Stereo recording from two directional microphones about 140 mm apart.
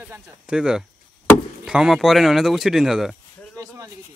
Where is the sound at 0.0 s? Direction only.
5° right (ahead or behind).